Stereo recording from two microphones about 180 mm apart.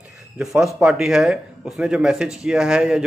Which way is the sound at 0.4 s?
5° right (ahead or behind).